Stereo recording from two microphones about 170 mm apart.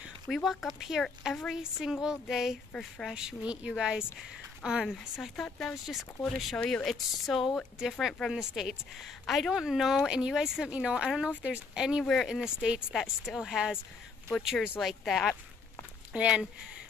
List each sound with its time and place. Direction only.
0.3 s speech: centre (ahead or behind)